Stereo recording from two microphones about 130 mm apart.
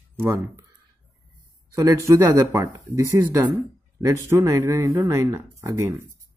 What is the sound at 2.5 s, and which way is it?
Speech, 25° right (ahead or behind).